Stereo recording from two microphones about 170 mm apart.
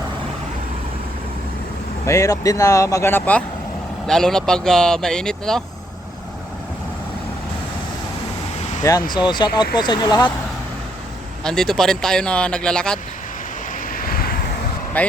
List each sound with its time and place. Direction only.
2.0 s speech: 20° left (ahead or behind)
8.8 s speech: 20° left (ahead or behind)
11.4 s speech: 5° left (ahead or behind)
13.9 s vehicle: 60° left (ahead or behind)
15.0 s speech: 10° left (ahead or behind)